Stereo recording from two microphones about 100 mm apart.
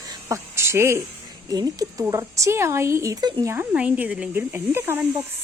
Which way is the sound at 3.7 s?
10° right (ahead or behind).